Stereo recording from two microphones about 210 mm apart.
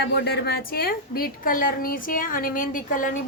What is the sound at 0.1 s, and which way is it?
A woman's voice, 50° left (ahead or behind).